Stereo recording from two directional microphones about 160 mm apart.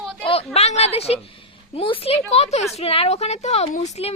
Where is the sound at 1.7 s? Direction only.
35° left (ahead or behind).